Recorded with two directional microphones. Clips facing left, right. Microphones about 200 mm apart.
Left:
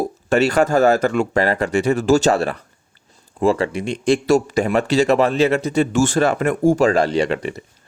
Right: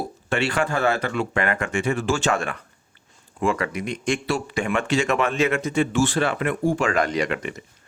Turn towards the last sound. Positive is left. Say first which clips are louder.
# left 5 dB
turn(degrees=35)  # may be behind; listen again after turning